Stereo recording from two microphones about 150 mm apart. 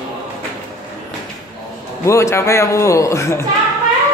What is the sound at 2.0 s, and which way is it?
Speech, 20° left (ahead or behind).